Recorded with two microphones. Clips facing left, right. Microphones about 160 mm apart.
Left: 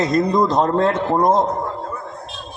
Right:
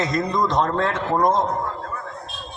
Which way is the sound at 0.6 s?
25° left (ahead or behind).